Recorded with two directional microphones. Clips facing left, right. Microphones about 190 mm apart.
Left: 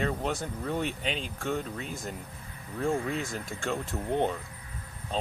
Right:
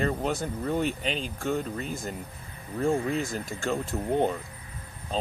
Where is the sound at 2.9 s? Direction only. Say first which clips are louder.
Right 3 dB; 30° right (ahead or behind).